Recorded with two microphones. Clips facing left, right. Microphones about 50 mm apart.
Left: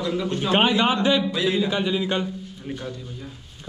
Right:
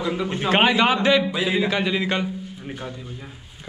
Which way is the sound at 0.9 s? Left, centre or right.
Centre.